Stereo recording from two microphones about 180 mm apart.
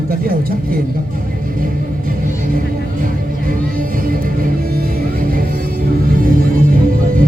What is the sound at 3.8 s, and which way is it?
Music, 50° right (ahead or behind).